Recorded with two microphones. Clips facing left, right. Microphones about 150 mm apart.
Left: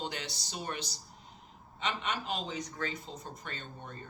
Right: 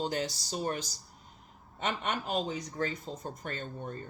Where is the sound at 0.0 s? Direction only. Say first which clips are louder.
Right 7 dB; 45° right (ahead or behind).